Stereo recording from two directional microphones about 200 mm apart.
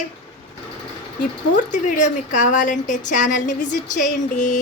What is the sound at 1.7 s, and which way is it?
A woman's voice, 40° left (ahead or behind).